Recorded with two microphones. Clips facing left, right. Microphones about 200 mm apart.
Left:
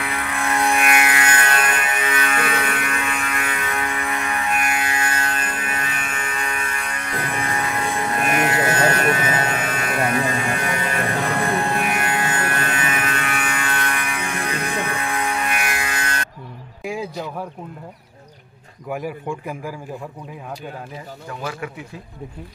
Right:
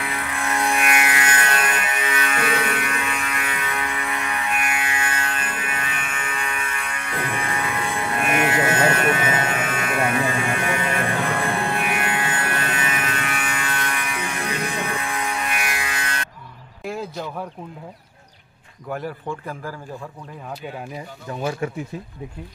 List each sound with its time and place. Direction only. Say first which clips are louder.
0.0 s music: left 2 dB; 75° left (ahead or behind); by 16.3 s 45° left (ahead or behind)
16.8 s a sound: left 2 dB; centre (ahead or behind)
18.9 s a man's voice: left 2 dB; 10° left (ahead or behind)
21.3 s speech: right 4 dB; 25° right (ahead or behind)